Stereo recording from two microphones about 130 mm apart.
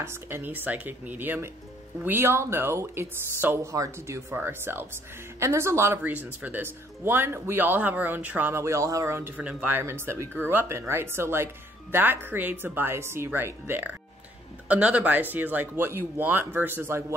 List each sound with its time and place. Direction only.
0.0 s speech: 20° right (ahead or behind)
9.4 s speech: 10° right (ahead or behind)